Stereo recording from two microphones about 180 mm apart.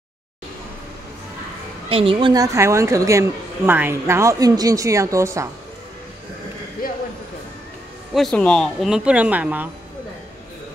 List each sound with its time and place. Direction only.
1.9 s a woman's voice: 30° right (ahead or behind)
8.1 s speech: 5° left (ahead or behind)